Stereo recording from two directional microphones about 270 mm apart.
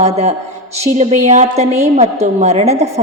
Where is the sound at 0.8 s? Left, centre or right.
Right.